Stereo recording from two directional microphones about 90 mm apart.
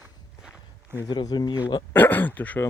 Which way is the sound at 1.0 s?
45° left (ahead or behind).